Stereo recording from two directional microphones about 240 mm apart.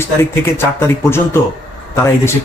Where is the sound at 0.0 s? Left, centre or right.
Centre.